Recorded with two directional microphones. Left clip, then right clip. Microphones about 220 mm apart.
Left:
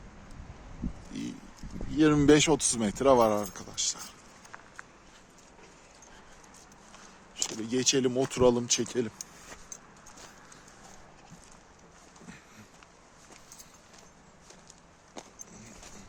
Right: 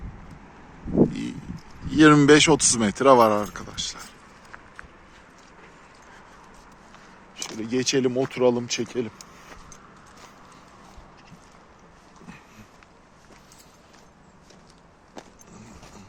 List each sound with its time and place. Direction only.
1.1 s vehicle: 5° left (ahead or behind)
1.9 s speech: 5° right (ahead or behind); by 4.1 s 15° left (ahead or behind)
7.3 s a sound: centre (ahead or behind)
7.6 s speech: 15° left (ahead or behind)
8.3 s speech: 30° left (ahead or behind)